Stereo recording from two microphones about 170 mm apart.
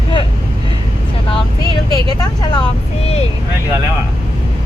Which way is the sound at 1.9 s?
25° left (ahead or behind).